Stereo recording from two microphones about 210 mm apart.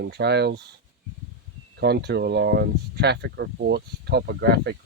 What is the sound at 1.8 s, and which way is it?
Speech, 50° right (ahead or behind).